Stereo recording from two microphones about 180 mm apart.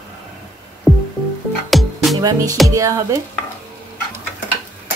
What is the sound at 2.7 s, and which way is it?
Speech, 20° right (ahead or behind).